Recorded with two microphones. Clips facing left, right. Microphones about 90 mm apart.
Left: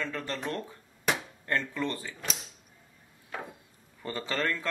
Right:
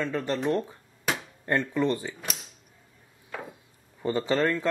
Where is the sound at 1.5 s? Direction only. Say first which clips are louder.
Right 6 dB; 20° right (ahead or behind).